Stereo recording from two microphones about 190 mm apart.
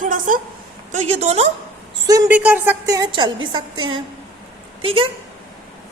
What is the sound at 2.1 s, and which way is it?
A woman's voice, 15° right (ahead or behind).